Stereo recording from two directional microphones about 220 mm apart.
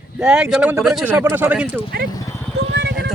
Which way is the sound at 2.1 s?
15° left (ahead or behind).